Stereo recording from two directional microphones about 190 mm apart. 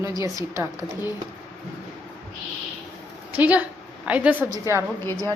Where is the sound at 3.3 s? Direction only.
10° right (ahead or behind).